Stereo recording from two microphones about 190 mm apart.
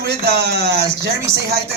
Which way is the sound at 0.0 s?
60° right (ahead or behind).